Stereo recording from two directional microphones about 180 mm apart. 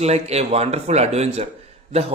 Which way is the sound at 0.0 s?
35° right (ahead or behind).